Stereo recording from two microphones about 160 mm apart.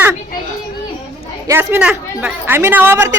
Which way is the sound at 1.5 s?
15° right (ahead or behind).